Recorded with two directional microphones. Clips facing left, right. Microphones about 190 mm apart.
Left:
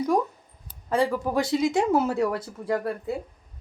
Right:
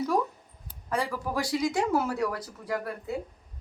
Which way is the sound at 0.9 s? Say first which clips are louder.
Left 6 dB; 25° left (ahead or behind).